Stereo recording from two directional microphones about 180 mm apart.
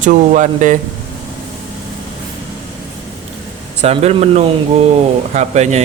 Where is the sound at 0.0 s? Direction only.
45° right (ahead or behind).